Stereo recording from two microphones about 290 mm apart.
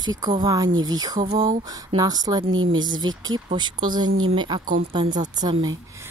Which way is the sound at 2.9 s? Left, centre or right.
Centre.